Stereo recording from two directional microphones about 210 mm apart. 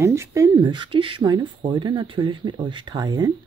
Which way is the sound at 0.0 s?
15° right (ahead or behind).